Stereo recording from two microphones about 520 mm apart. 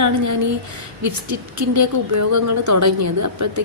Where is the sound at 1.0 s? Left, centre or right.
Right.